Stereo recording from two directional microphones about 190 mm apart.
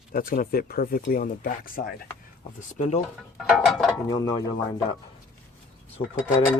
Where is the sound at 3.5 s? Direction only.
Centre (ahead or behind).